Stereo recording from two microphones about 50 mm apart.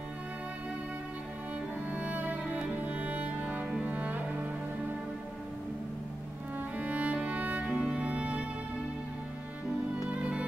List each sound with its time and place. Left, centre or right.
1.9 s music: right
3.8 s cello: right
6.8 s music: right